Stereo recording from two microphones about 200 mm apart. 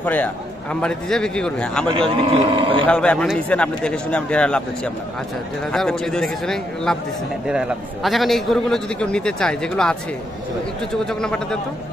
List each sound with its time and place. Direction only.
0.0 s a man's voice: 10° left (ahead or behind)
1.9 s speech: 25° right (ahead or behind)
2.9 s a man's voice: 5° left (ahead or behind)
5.7 s a man's voice: 5° left (ahead or behind)